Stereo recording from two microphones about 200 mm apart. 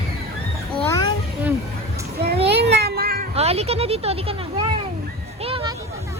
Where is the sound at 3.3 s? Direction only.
30° right (ahead or behind).